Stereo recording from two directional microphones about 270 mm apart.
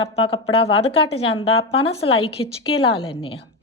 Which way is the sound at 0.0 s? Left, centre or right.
Left.